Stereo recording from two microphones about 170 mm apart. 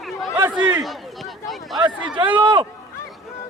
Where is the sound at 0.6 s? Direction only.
10° right (ahead or behind).